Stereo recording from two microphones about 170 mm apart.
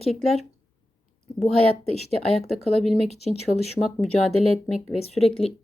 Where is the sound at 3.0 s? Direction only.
40° left (ahead or behind).